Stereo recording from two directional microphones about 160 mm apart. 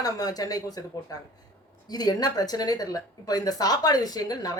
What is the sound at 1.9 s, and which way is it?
A man's voice, 25° left (ahead or behind).